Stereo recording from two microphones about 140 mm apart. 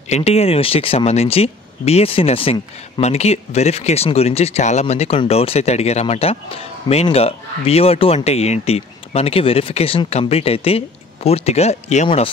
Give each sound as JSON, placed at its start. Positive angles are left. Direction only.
{"t": 0.1, "sound": "speech", "side_deg": 45}